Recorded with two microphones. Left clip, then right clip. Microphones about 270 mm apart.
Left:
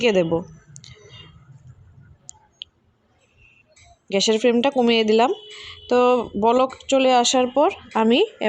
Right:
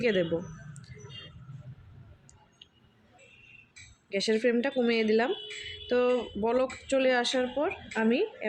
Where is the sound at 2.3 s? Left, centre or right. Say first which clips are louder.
Left 17 dB; left.